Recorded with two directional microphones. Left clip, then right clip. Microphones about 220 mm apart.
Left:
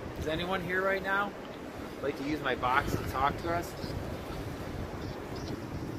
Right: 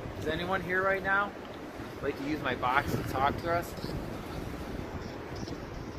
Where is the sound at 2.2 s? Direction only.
50° right (ahead or behind).